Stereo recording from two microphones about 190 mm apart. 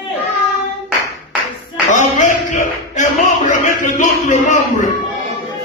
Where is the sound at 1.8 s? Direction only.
40° left (ahead or behind).